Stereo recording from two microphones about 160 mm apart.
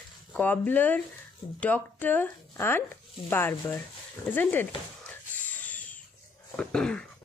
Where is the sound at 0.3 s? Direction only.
10° left (ahead or behind).